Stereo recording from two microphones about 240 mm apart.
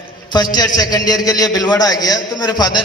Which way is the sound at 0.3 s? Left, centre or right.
Centre.